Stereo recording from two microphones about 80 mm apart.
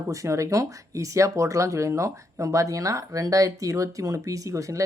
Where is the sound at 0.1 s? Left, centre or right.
Right.